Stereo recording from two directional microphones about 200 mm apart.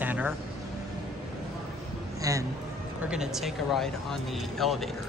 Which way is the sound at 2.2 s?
15° right (ahead or behind).